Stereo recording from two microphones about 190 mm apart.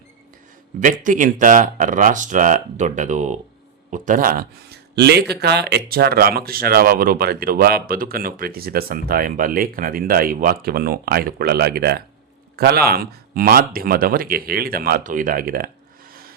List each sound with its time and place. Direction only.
0.8 s speech: 45° right (ahead or behind)